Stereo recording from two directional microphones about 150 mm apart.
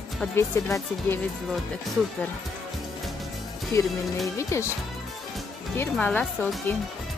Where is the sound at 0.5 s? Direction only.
15° left (ahead or behind).